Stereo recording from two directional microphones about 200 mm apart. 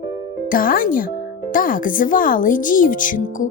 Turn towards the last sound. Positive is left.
turn(degrees=40)  # may be behind; listen again after turning